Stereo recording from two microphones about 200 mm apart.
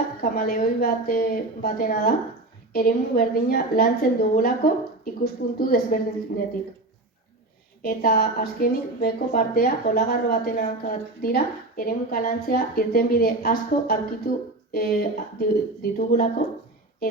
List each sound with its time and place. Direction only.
0.2 s a woman's voice: 50° left (ahead or behind)
7.8 s a woman's voice: 45° left (ahead or behind)